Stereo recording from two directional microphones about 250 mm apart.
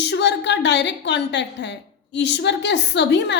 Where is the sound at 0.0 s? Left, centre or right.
Left.